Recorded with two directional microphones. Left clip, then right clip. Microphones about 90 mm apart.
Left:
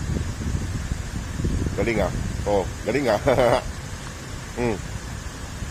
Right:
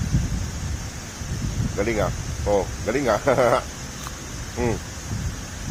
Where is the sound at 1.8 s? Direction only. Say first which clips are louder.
Even; 20° left (ahead or behind).